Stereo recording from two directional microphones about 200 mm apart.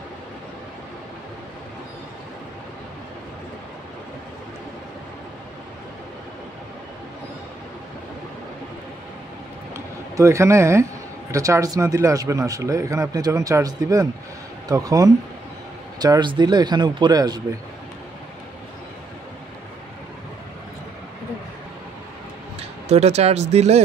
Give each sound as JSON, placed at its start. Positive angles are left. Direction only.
{"t": 9.8, "sound": "a man's voice", "side_deg": -15}
{"t": 22.6, "sound": "speech", "side_deg": -30}